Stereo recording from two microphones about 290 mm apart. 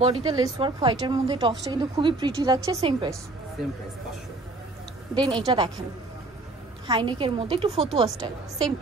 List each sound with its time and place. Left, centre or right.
0.0 s a woman's voice: centre
5.1 s a woman's voice: centre
6.9 s a woman's voice: centre